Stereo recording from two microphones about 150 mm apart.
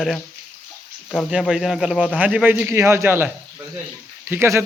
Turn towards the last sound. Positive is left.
turn(degrees=-15)  # may be behind; listen again after turning